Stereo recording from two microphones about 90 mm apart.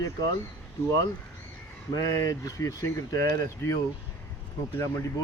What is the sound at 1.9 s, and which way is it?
Speech, 40° left (ahead or behind).